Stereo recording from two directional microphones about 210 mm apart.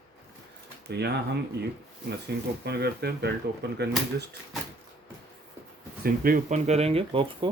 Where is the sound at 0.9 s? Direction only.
55° right (ahead or behind).